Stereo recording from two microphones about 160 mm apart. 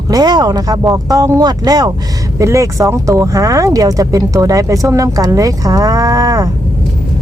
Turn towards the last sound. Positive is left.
turn(degrees=-20)  # may be behind; listen again after turning